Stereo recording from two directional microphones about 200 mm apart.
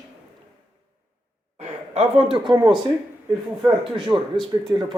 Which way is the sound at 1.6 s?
30° right (ahead or behind).